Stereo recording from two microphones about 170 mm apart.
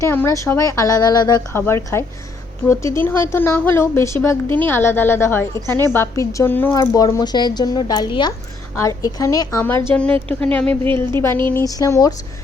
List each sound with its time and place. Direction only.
0.0 s a woman's voice: 15° left (ahead or behind)